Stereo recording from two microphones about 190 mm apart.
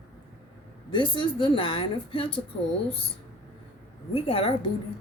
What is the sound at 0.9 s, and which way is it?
Speech, 25° left (ahead or behind).